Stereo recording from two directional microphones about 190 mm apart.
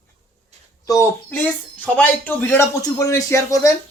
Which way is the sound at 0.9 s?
10° left (ahead or behind).